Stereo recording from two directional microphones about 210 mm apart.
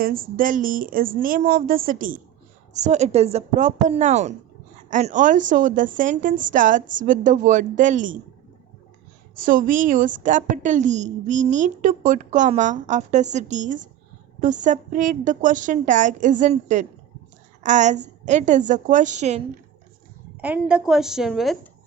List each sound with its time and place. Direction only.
0.0 s a woman's voice: 45° right (ahead or behind)
9.4 s a woman's voice: 40° right (ahead or behind)
20.4 s a woman's voice: 5° right (ahead or behind)